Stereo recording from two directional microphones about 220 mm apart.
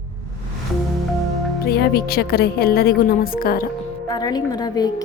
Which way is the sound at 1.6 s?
45° left (ahead or behind).